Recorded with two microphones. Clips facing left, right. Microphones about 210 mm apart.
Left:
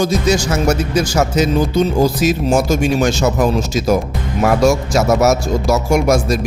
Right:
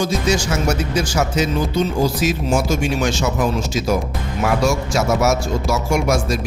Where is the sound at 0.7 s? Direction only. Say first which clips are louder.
Left 5 dB; 40° left (ahead or behind).